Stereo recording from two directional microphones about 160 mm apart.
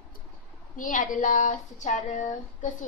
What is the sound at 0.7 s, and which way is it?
Speech, 55° left (ahead or behind).